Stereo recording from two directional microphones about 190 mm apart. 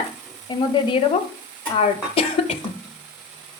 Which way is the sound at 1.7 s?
30° left (ahead or behind).